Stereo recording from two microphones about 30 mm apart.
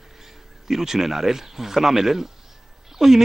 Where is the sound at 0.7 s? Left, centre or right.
Centre.